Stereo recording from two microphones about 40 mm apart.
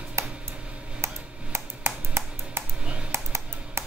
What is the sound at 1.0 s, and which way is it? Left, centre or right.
Tick-tock, right.